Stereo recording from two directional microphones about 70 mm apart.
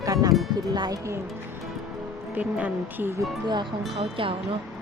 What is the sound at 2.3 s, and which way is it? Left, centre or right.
Speech, right.